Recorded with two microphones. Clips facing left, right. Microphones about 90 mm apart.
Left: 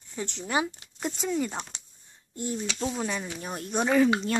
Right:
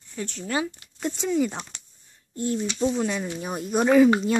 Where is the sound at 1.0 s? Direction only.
Centre (ahead or behind).